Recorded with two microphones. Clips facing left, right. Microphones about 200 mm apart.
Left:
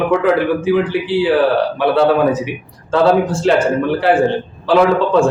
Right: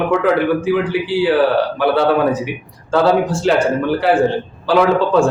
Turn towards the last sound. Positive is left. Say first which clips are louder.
# left 1 dB
turn(degrees=0)  # may be behind; listen again after turning